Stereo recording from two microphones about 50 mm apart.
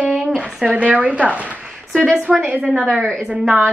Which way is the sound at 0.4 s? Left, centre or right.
Centre.